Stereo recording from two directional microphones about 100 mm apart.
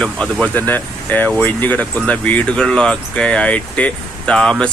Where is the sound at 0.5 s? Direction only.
20° left (ahead or behind).